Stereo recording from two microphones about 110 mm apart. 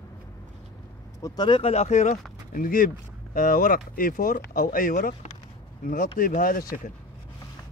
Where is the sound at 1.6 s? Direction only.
70° left (ahead or behind).